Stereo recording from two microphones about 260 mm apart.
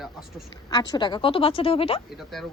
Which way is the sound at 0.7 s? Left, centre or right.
Centre.